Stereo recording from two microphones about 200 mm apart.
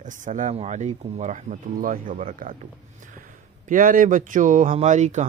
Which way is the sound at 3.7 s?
40° right (ahead or behind).